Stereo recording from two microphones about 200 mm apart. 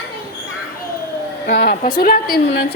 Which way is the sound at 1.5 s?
50° left (ahead or behind).